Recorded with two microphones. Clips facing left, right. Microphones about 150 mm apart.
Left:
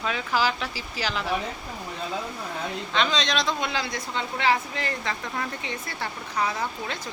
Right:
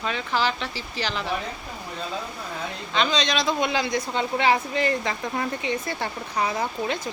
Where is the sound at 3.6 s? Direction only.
15° right (ahead or behind).